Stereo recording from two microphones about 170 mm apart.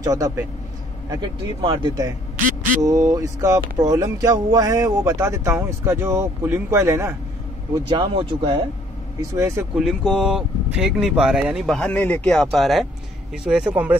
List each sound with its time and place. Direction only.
0.0 s speech: 20° right (ahead or behind)
7.9 s speech: 30° right (ahead or behind)
9.3 s speech: 15° right (ahead or behind)
9.8 s speech: centre (ahead or behind)